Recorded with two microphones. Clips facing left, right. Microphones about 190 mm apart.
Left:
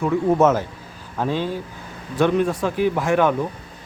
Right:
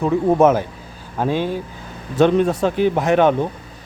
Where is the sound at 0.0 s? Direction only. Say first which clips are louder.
Right 3 dB; 20° right (ahead or behind).